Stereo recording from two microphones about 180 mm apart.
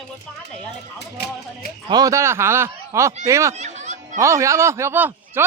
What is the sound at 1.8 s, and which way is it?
Speech, 20° right (ahead or behind).